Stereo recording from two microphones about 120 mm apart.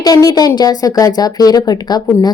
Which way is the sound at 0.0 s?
30° left (ahead or behind).